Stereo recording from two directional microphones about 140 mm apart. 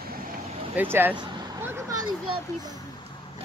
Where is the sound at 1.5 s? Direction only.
20° right (ahead or behind).